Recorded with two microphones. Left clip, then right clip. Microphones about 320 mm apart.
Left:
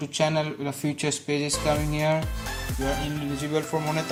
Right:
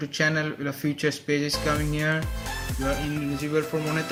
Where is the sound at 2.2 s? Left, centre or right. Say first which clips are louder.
Left 1 dB; centre.